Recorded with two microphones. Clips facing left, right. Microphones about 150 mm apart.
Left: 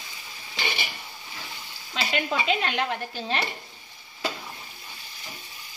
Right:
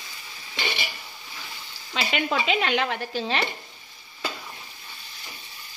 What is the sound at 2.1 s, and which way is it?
Speech, 90° right.